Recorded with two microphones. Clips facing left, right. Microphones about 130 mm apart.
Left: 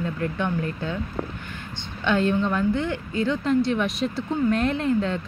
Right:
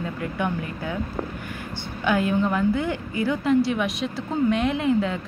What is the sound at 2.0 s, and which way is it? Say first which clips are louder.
A woman's voice: even; 10° right (ahead or behind).